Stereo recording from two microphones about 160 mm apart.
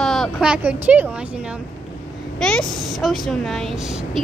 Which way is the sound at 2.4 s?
5° left (ahead or behind).